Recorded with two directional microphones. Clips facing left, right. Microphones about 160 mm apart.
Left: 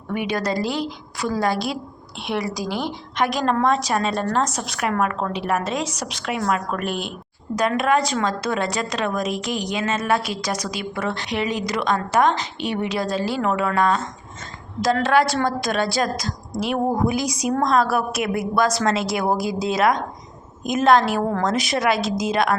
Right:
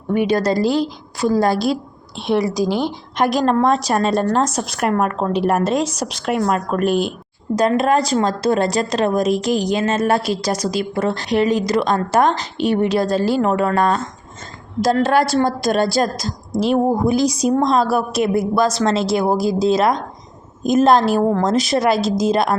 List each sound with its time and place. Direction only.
0.1 s a woman's voice: 35° right (ahead or behind)
2.3 s speech: centre (ahead or behind)
3.2 s a woman's voice: 35° right (ahead or behind)